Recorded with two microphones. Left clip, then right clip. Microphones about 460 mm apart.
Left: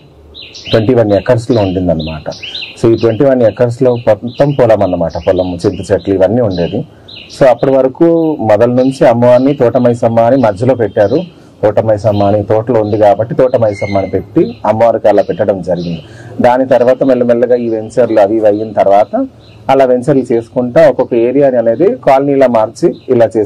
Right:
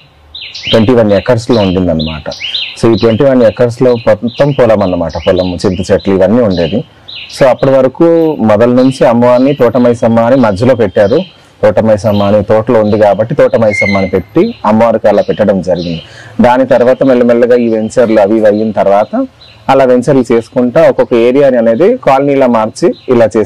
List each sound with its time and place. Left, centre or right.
0.7 s a man's voice: right
2.8 s a man's voice: right